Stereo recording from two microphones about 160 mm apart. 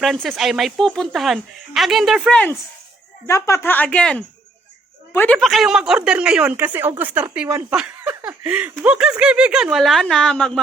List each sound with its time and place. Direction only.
0.0 s speech: centre (ahead or behind)
5.4 s speech: centre (ahead or behind); by 7.8 s 15° right (ahead or behind)
7.8 s a sound: 5° right (ahead or behind)
8.8 s speech: 5° right (ahead or behind)